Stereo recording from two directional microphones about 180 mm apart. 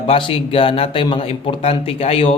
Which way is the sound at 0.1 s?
30° left (ahead or behind).